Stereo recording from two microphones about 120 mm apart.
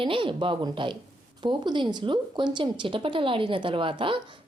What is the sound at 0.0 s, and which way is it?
A woman's voice, 45° right (ahead or behind).